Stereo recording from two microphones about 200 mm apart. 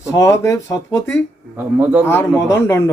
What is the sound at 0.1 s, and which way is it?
Speech, 15° left (ahead or behind).